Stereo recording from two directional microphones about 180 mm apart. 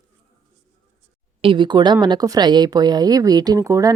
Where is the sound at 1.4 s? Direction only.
25° right (ahead or behind).